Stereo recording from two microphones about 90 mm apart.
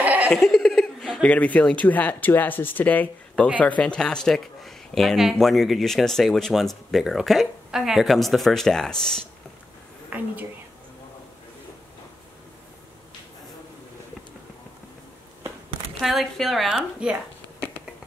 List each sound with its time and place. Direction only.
0.3 s speech: 5° left (ahead or behind)
1.2 s speech: 15° left (ahead or behind)
10.0 s a woman's voice: 20° right (ahead or behind)
16.0 s speech: centre (ahead or behind)
17.0 s speech: 10° right (ahead or behind)